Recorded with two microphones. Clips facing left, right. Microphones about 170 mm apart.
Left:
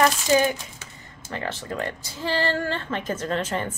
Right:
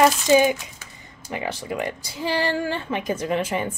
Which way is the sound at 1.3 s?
10° right (ahead or behind).